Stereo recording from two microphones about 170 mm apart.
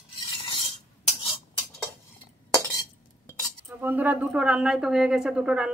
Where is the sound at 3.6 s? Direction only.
10° right (ahead or behind).